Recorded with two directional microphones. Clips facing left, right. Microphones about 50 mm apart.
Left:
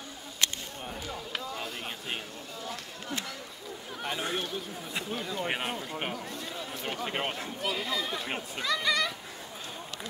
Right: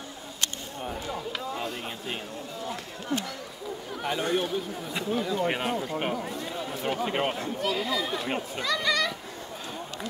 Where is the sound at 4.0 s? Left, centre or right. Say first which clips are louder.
Right 6 dB; centre.